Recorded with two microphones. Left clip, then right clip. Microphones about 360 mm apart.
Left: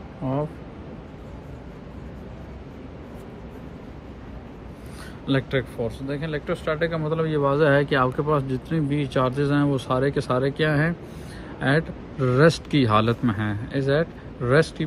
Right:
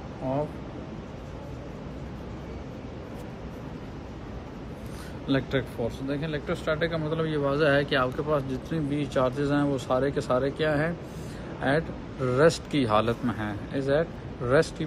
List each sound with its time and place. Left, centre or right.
5.2 s speech: centre
12.3 s speech: left